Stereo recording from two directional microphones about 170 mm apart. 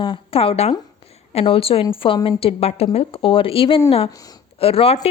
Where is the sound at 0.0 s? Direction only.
30° left (ahead or behind).